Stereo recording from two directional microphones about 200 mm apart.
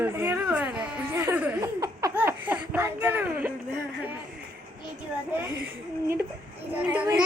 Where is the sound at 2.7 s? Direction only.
10° right (ahead or behind).